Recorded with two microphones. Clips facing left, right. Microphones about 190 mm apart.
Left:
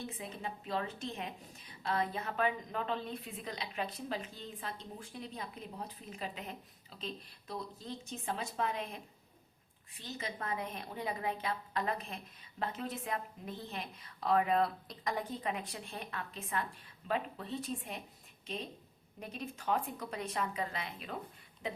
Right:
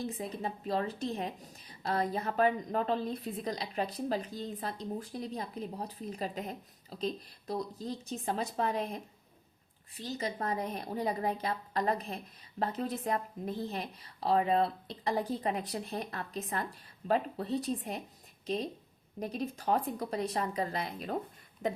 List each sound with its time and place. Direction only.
0.0 s a woman's voice: 35° right (ahead or behind)